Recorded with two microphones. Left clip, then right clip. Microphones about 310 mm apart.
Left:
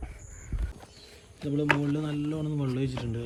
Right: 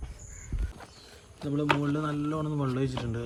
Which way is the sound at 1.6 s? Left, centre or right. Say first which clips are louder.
Left 1 dB; right.